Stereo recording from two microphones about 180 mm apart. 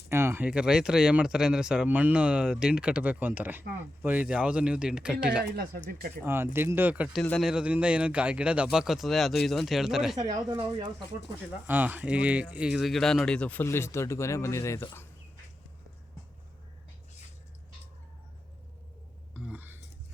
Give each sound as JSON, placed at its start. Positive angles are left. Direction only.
{"t": 0.1, "sound": "speech", "side_deg": -15}
{"t": 5.5, "sound": "speech", "side_deg": -55}
{"t": 6.2, "sound": "speech", "side_deg": -10}
{"t": 10.2, "sound": "speech", "side_deg": -20}
{"t": 11.6, "sound": "speech", "side_deg": -10}
{"t": 19.3, "sound": "a sound", "side_deg": -5}